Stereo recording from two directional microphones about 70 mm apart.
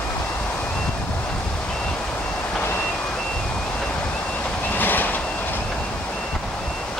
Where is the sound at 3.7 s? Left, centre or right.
Centre.